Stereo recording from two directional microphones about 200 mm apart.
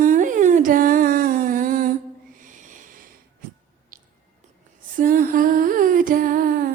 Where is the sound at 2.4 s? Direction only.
40° right (ahead or behind).